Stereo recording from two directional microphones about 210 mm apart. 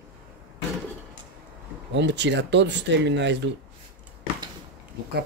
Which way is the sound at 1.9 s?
55° right (ahead or behind).